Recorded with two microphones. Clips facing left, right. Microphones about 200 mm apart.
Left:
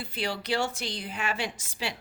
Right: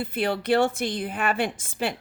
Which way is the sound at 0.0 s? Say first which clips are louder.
Right 7 dB; 55° right (ahead or behind).